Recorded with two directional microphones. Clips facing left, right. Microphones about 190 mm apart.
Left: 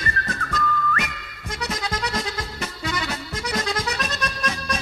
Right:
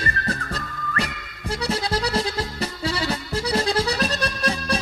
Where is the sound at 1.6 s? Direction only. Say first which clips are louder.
Right 4 dB; 30° right (ahead or behind).